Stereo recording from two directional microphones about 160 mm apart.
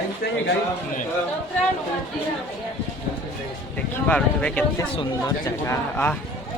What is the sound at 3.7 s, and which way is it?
Speech, 5° left (ahead or behind).